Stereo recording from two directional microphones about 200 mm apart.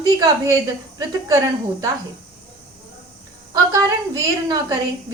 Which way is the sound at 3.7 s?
20° right (ahead or behind).